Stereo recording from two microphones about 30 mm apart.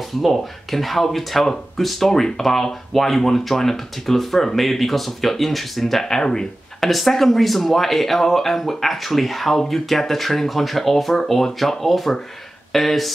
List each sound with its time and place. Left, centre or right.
0.0 s speech: centre
6.0 s speech: left
6.8 s speech: centre